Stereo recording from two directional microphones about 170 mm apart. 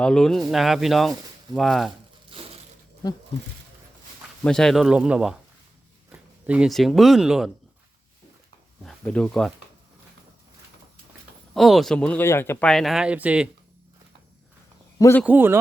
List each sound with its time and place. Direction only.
0.0 s speech: 5° left (ahead or behind)
2.3 s a sound: 30° right (ahead or behind)
4.4 s speech: 5° left (ahead or behind)
8.8 s speech: 5° left (ahead or behind)
11.5 s speech: centre (ahead or behind)
14.9 s a man's voice: 15° left (ahead or behind)
15.2 s a man's voice: 10° right (ahead or behind)